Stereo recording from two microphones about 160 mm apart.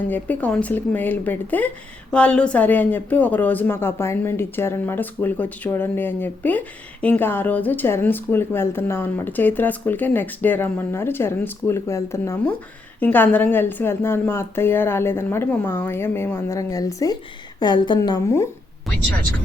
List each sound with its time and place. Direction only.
0.1 s a woman's voice: 10° left (ahead or behind); by 18.2 s 30° left (ahead or behind)